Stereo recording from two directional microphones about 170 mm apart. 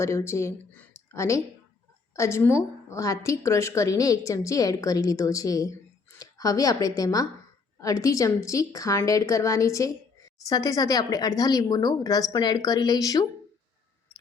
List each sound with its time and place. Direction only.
0.0 s a woman's voice: 15° left (ahead or behind)